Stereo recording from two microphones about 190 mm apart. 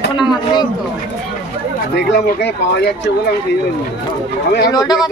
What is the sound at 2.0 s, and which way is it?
Speech, 60° left (ahead or behind).